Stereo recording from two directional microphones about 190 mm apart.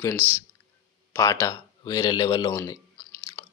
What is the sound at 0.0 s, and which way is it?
A man's voice, 10° left (ahead or behind).